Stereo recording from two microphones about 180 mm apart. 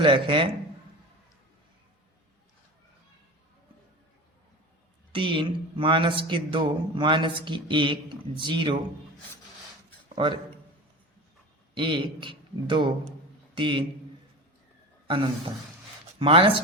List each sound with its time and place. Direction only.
0.0 s speech: 30° right (ahead or behind)
5.1 s speech: 30° right (ahead or behind)
10.2 s speech: 25° right (ahead or behind)
11.7 s speech: 25° right (ahead or behind)
15.0 s speech: 30° right (ahead or behind)